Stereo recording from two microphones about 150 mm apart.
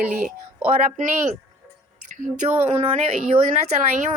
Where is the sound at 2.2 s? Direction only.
55° right (ahead or behind).